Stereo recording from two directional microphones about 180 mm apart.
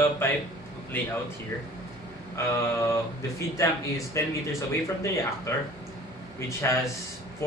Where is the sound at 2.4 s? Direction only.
15° left (ahead or behind).